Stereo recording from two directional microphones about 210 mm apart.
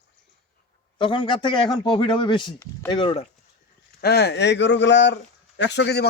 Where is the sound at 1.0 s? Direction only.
20° left (ahead or behind).